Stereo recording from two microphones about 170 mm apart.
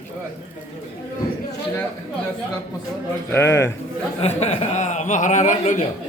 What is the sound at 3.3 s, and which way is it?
Speech, 15° left (ahead or behind).